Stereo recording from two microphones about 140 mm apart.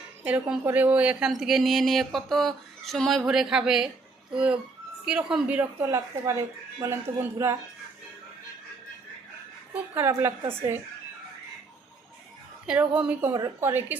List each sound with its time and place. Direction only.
0.2 s a woman's voice: 10° right (ahead or behind)
9.7 s a woman's voice: 15° right (ahead or behind)
12.6 s a woman's voice: 5° right (ahead or behind)